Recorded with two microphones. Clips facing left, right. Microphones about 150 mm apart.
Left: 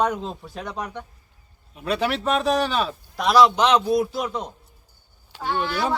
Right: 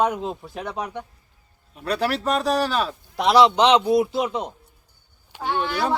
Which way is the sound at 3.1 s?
25° right (ahead or behind).